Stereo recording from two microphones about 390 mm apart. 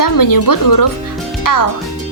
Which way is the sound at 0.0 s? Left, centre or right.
Left.